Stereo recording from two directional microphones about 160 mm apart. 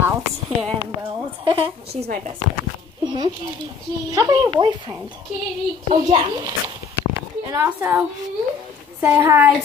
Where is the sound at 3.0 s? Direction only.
30° right (ahead or behind).